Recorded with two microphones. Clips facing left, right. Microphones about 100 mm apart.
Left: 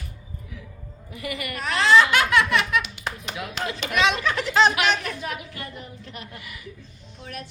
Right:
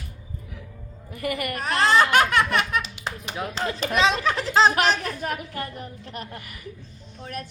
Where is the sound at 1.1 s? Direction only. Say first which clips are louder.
Right 4 dB; 50° right (ahead or behind).